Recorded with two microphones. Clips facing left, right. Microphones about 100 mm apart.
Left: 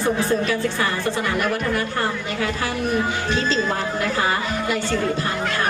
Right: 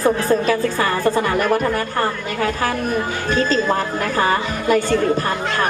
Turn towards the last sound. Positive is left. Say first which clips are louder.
# right 6 dB
turn(degrees=-45)  # may be behind; listen again after turning